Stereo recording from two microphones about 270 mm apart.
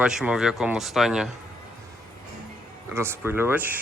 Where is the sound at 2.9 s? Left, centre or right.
Centre.